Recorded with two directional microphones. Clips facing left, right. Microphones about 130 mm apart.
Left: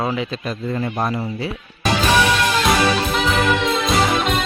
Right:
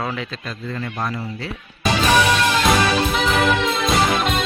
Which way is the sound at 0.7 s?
20° left (ahead or behind).